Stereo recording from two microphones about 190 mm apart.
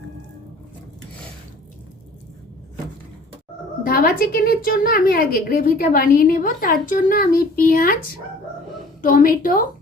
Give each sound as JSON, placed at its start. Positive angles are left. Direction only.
{"t": 3.8, "sound": "a woman's voice", "side_deg": 50}
{"t": 9.0, "sound": "a woman's voice", "side_deg": 50}